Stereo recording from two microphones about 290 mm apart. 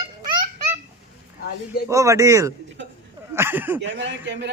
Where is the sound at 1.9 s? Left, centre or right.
Centre.